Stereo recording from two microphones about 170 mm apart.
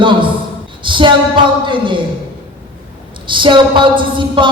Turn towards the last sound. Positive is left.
turn(degrees=-30)  # may be behind; listen again after turning